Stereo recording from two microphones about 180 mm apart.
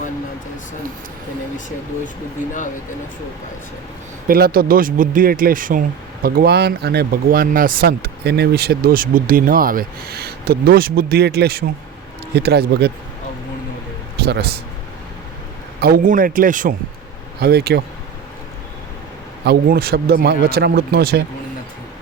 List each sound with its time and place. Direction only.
4.3 s speech: 55° right (ahead or behind)
6.2 s speech: 60° right (ahead or behind)
14.2 s a man's voice: 65° right (ahead or behind)
15.8 s speech: 55° right (ahead or behind)
17.4 s speech: 65° right (ahead or behind)
19.5 s speech: 60° right (ahead or behind)